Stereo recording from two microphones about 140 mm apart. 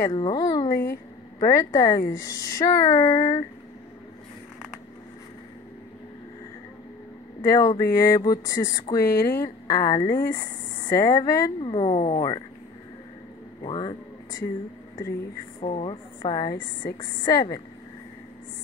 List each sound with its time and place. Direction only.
0.1 s speech: 35° left (ahead or behind)
7.4 s speech: 25° left (ahead or behind)
11.6 s speech: 35° left (ahead or behind)
13.7 s speech: 35° left (ahead or behind)
15.6 s speech: 40° left (ahead or behind)
16.2 s speech: 30° left (ahead or behind)